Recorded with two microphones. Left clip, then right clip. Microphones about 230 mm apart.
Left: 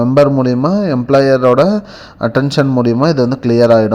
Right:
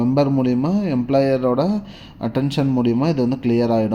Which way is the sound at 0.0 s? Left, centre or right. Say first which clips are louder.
Left 8 dB; centre.